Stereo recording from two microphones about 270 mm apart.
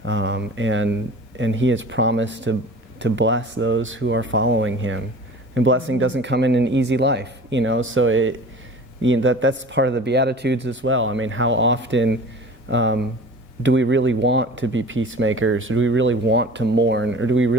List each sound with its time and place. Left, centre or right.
0.0 s speech: right